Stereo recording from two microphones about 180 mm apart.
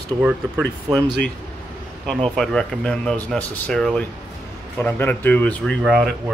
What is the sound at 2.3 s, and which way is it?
Speech, centre (ahead or behind).